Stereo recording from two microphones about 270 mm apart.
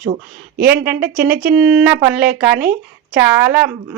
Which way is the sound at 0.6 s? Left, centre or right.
Centre.